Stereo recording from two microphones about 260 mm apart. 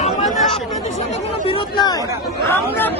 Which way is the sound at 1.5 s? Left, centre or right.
Centre.